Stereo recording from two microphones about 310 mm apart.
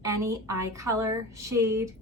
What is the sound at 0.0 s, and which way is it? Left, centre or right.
Speech, centre.